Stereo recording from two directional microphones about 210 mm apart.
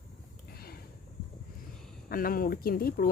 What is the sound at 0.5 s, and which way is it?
Sniff, 45° left (ahead or behind).